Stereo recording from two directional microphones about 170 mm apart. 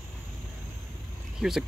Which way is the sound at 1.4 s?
Centre (ahead or behind).